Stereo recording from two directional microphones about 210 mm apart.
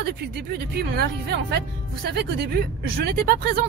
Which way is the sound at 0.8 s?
50° right (ahead or behind).